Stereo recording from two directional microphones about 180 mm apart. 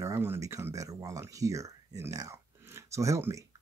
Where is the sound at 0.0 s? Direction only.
15° right (ahead or behind).